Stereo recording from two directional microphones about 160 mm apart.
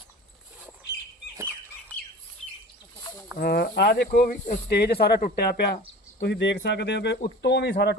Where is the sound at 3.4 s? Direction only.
85° left; by 4.6 s 55° left (ahead or behind).